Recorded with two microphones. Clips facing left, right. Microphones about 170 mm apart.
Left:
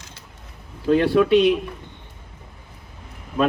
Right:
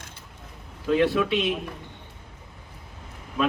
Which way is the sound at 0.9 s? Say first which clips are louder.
Left 6 dB; 35° left (ahead or behind).